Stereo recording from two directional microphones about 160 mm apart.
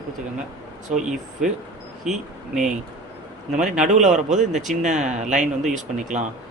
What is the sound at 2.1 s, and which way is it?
Speech, 5° right (ahead or behind).